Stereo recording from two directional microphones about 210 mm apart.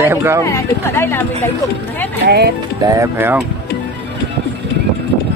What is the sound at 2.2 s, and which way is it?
Speech, 50° right (ahead or behind).